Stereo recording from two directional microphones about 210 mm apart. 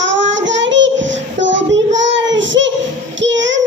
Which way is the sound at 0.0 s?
60° right (ahead or behind).